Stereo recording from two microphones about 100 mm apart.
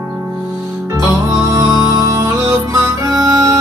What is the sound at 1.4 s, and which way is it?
Music, 35° right (ahead or behind).